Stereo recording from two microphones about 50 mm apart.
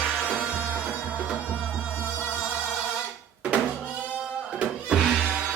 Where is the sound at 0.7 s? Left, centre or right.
Right.